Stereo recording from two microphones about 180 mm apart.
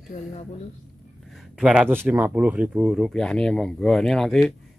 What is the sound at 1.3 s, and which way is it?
Speech, 5° right (ahead or behind).